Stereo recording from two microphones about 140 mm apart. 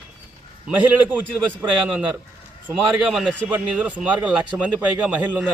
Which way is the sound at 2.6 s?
10° right (ahead or behind).